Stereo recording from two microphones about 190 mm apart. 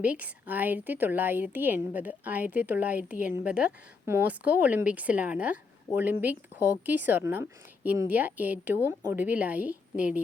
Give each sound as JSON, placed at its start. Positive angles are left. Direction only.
{"t": 0.0, "sound": "speech", "side_deg": -10}